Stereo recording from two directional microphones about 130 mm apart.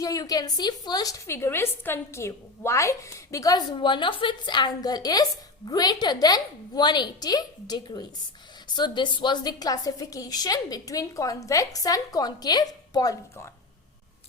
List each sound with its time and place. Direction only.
0.0 s a woman's voice: 30° left (ahead or behind)